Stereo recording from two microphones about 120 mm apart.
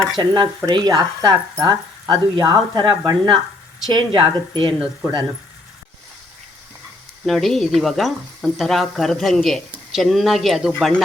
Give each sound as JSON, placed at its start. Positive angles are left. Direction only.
{"t": 0.2, "sound": "speech", "side_deg": -40}
{"t": 7.3, "sound": "speech", "side_deg": 0}